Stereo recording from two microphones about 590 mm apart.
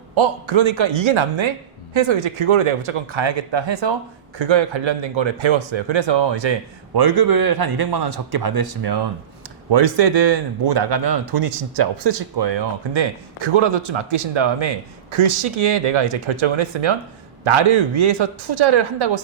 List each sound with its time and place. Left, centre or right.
0.2 s a man's voice: right
15.1 s speech: right